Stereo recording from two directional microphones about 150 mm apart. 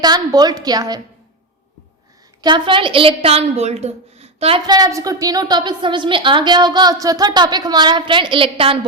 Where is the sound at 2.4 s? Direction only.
30° right (ahead or behind).